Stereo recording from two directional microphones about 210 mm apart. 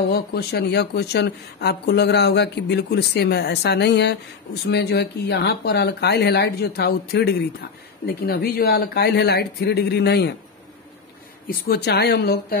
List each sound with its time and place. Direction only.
0.1 s speech: 50° left (ahead or behind)
11.4 s speech: 50° left (ahead or behind)